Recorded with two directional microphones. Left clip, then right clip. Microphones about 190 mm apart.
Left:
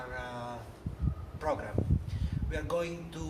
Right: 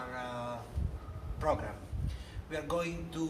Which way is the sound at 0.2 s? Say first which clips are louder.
Right 2 dB; 15° right (ahead or behind).